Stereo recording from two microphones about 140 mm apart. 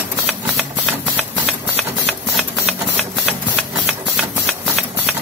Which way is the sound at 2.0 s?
Centre (ahead or behind).